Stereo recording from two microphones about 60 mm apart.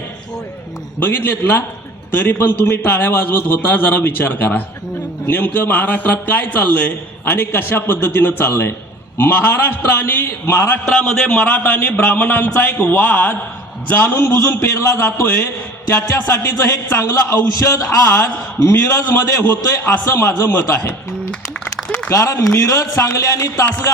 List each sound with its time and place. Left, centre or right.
0.9 s a man's voice: left
10.2 s a man's voice: left
10.8 s a man's voice: centre; by 14.2 s left
14.2 s a man's voice: left
20.1 s a man's voice: left
22.1 s a man's voice: left